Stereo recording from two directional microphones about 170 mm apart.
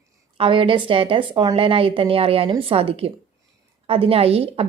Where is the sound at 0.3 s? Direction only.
30° right (ahead or behind).